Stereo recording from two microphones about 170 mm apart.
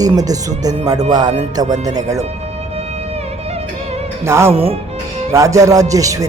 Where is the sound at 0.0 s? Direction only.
20° right (ahead or behind).